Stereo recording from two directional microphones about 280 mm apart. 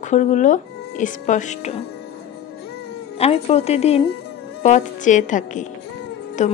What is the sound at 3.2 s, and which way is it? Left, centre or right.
Speech, left.